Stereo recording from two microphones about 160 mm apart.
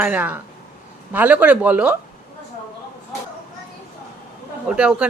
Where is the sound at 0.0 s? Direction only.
10° right (ahead or behind).